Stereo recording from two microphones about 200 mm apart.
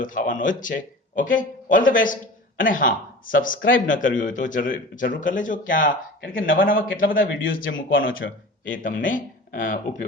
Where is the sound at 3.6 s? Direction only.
75° left (ahead or behind).